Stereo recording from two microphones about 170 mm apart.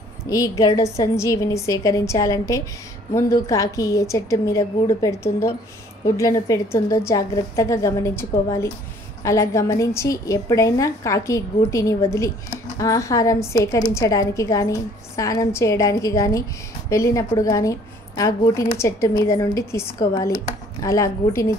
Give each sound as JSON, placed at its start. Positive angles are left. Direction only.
{"t": 0.2, "sound": "a woman's voice", "side_deg": 20}